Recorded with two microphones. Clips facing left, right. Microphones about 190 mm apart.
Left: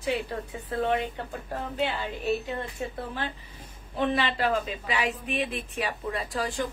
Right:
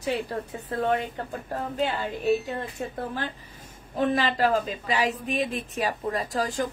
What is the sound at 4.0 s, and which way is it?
A woman's voice, 45° right (ahead or behind).